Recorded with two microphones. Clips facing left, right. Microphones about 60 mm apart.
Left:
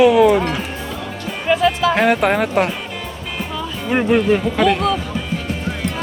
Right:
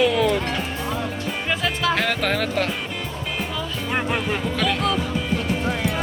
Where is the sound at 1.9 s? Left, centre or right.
Left.